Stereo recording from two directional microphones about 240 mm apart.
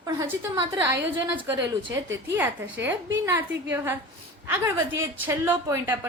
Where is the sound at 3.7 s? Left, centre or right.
Centre.